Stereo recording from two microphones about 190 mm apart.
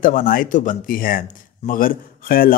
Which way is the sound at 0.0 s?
45° left (ahead or behind).